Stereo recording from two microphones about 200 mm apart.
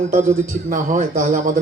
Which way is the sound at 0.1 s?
40° right (ahead or behind).